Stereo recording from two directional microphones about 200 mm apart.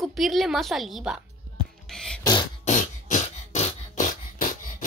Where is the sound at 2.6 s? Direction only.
40° left (ahead or behind).